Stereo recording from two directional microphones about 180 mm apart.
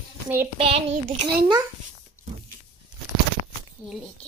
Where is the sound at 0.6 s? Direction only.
30° right (ahead or behind).